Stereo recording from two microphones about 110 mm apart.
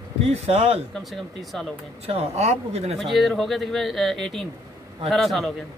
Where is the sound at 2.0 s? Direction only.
65° right (ahead or behind).